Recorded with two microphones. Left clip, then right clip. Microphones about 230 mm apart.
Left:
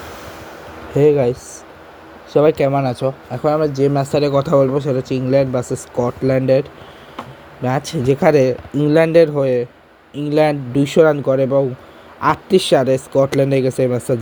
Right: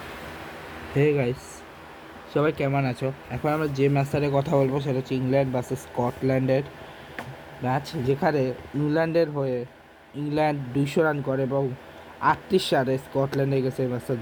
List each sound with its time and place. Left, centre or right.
0.9 s speech: centre